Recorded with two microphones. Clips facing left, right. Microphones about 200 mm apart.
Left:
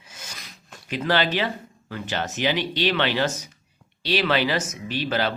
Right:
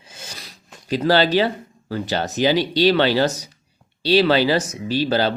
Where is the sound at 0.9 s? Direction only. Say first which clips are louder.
Right 6 dB; 35° right (ahead or behind).